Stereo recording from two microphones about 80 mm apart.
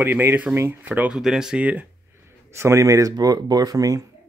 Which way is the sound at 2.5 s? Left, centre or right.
Right.